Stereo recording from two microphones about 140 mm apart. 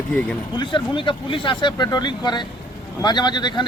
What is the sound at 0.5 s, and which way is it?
Speech, 35° left (ahead or behind).